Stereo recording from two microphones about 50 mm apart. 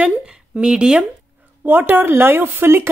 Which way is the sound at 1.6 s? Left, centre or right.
Right.